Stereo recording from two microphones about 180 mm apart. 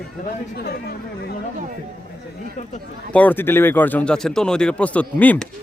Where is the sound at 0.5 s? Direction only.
60° left (ahead or behind).